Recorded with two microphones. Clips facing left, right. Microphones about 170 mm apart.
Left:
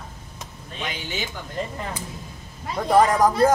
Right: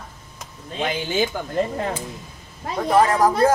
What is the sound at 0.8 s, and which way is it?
Speech, 55° right (ahead or behind).